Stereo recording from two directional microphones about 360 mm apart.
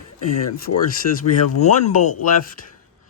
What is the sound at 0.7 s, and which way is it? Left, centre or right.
Speech, left.